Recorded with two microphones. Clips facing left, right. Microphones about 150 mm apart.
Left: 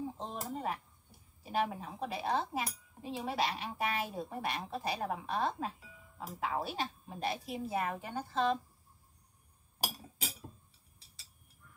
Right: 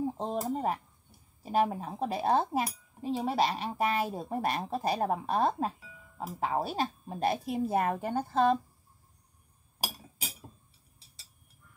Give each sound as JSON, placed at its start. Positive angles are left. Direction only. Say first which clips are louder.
{"t": 0.0, "sound": "a woman's voice", "louder": "right 8 dB", "side_deg": -40}